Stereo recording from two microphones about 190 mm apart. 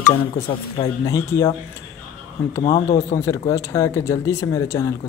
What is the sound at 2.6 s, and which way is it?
Speech, 35° left (ahead or behind).